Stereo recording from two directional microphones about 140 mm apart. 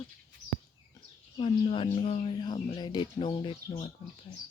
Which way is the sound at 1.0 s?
35° left (ahead or behind).